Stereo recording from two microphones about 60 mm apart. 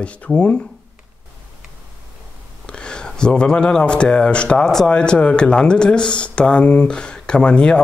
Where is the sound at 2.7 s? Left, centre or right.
Centre.